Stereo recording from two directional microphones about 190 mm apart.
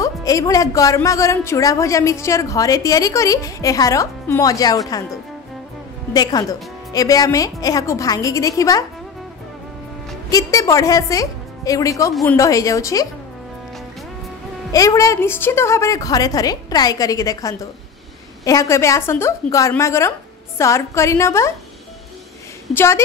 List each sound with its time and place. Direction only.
0.0 s a woman's voice: 20° left (ahead or behind)
6.9 s a woman's voice: 20° left (ahead or behind)
10.3 s a woman's voice: 15° left (ahead or behind)
14.7 s a woman's voice: 20° left (ahead or behind)
22.8 s a woman's voice: 15° left (ahead or behind)